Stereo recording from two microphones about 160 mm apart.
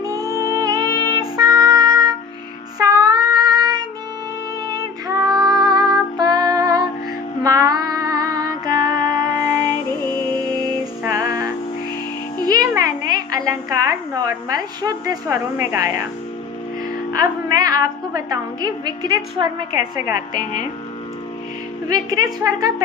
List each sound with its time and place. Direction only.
0.0 s music: 20° right (ahead or behind)
2.7 s child singing: 20° right (ahead or behind)
4.7 s female singing: 25° right (ahead or behind)
5.6 s music: 25° right (ahead or behind)
12.5 s a sound: 25° right (ahead or behind)
17.1 s music: 25° right (ahead or behind)
21.8 s a woman's voice: 25° right (ahead or behind)